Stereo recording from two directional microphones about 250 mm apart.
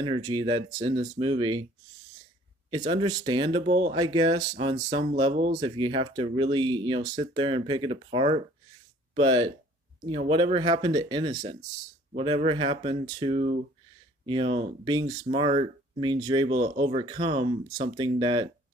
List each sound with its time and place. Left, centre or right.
0.0 s speech: centre
2.8 s speech: centre